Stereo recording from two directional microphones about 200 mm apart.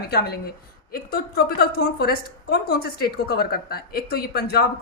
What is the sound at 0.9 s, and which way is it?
A woman's voice, 50° left (ahead or behind).